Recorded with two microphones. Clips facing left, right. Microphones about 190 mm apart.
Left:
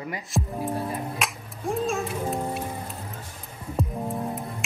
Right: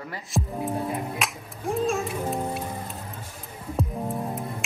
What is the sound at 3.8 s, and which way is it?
Music, centre (ahead or behind).